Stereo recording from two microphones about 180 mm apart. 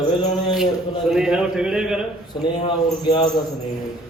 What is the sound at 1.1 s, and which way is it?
Speech, 5° right (ahead or behind).